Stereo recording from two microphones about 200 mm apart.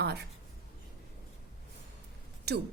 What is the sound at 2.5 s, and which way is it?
Speech, 55° right (ahead or behind).